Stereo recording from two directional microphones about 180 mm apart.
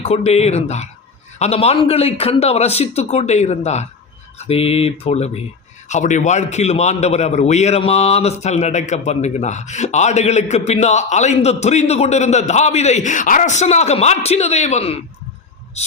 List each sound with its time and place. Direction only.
0.0 s a man's voice: 35° left (ahead or behind)